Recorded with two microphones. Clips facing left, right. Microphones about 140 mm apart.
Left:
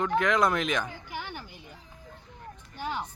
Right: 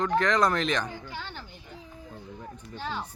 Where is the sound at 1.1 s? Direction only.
15° left (ahead or behind).